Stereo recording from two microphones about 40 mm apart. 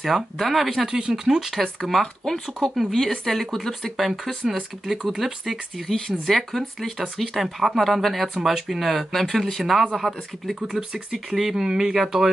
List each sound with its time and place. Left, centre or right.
0.0 s speech: centre
0.8 s speech: right
1.6 s speech: centre
4.2 s speech: centre
5.9 s speech: centre
9.9 s speech: centre